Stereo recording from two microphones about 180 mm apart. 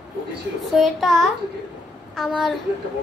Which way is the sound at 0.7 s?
Centre (ahead or behind).